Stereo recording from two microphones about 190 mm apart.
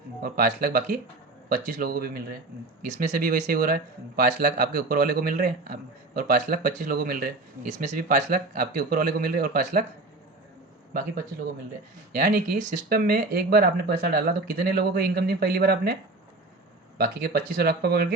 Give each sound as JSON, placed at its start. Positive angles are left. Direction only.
{"t": 0.2, "sound": "speech", "side_deg": -50}
{"t": 11.3, "sound": "speech", "side_deg": -55}
{"t": 12.1, "sound": "speech", "side_deg": -45}
{"t": 17.0, "sound": "speech", "side_deg": -50}